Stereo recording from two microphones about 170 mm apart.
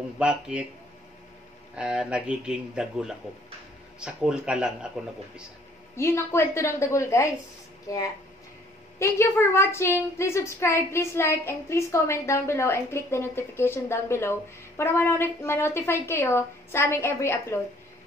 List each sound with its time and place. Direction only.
0.2 s a man's voice: 5° right (ahead or behind)
1.8 s a man's voice: 5° right (ahead or behind)
5.9 s speech: 15° left (ahead or behind)